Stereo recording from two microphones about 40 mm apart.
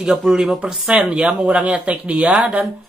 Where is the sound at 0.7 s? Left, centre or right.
Centre.